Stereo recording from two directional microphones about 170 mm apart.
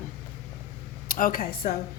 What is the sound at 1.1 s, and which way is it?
Speech, 55° left (ahead or behind).